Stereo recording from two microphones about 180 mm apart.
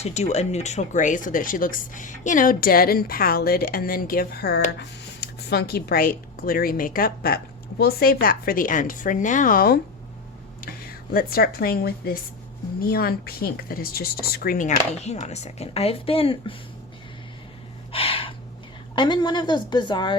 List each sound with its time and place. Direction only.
0.0 s a woman's voice: 40° left (ahead or behind); by 14.7 s 55° left (ahead or behind)
14.9 s speech: 35° left (ahead or behind)
17.9 s gasp: 30° left (ahead or behind)
18.9 s a woman's voice: 25° left (ahead or behind)